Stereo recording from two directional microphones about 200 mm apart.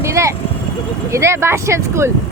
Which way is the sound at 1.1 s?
15° right (ahead or behind).